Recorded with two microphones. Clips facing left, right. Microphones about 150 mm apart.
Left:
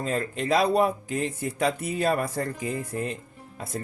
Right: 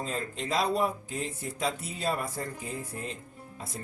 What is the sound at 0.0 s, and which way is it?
Speech, 65° left (ahead or behind).